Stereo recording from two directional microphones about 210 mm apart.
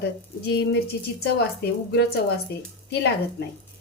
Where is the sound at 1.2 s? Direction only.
50° left (ahead or behind).